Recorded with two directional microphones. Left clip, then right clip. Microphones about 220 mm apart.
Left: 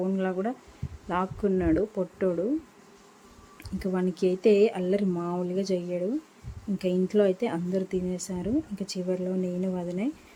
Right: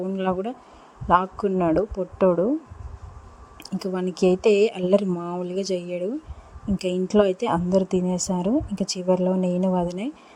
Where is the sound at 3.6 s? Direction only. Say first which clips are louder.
Right 2 dB; 20° right (ahead or behind).